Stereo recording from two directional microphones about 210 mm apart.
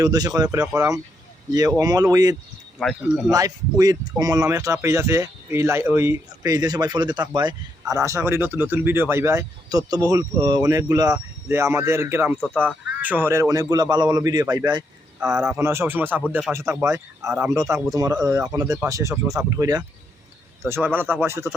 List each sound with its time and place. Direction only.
0.0 s speech: 15° right (ahead or behind)
1.8 s speech: 15° right (ahead or behind)
2.7 s speech: centre (ahead or behind)
3.3 s speech: 15° right (ahead or behind)
15.2 s speech: 5° right (ahead or behind)